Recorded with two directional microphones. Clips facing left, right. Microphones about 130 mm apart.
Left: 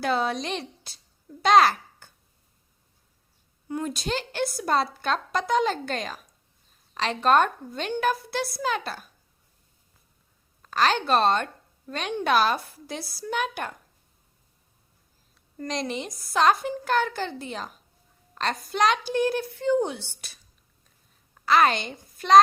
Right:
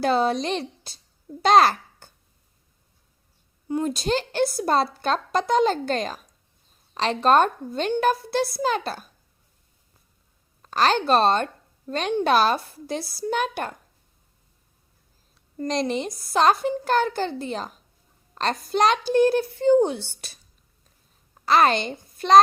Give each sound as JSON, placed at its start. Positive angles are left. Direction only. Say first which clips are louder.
{"t": 0.0, "sound": "a woman's voice", "louder": "right 4 dB", "side_deg": -30}
{"t": 3.7, "sound": "a woman's voice", "louder": "right 5 dB", "side_deg": -30}
{"t": 10.6, "sound": "a woman's voice", "louder": "right 3 dB", "side_deg": -30}
{"t": 15.5, "sound": "a woman's voice", "louder": "right 5 dB", "side_deg": -35}
{"t": 21.4, "sound": "a child's voice", "louder": "right 2 dB", "side_deg": -35}